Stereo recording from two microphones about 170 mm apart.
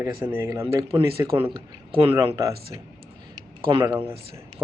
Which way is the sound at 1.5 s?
30° right (ahead or behind).